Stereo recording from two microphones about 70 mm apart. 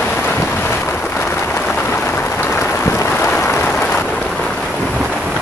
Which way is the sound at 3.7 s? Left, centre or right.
Centre.